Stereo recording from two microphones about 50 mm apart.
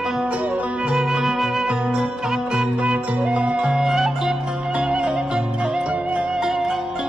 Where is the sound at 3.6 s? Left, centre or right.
Centre.